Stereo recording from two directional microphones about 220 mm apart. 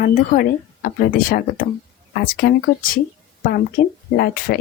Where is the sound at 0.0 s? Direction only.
40° left (ahead or behind).